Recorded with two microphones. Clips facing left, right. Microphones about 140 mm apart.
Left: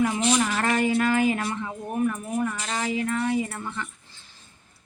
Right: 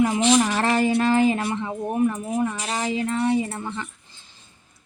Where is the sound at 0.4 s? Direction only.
30° right (ahead or behind).